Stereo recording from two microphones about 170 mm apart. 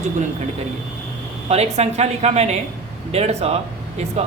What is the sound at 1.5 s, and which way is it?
A woman's voice, 40° right (ahead or behind).